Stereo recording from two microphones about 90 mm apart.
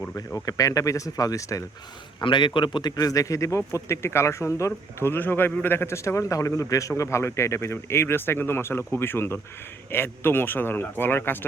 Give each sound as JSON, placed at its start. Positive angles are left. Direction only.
{"t": 0.3, "sound": "speech", "side_deg": 40}
{"t": 2.2, "sound": "a man's voice", "side_deg": 65}
{"t": 2.9, "sound": "speech", "side_deg": 40}